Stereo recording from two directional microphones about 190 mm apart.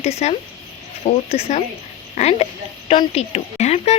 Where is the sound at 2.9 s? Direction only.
35° left (ahead or behind).